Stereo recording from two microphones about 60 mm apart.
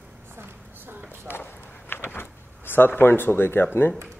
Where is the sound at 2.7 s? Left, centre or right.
Left.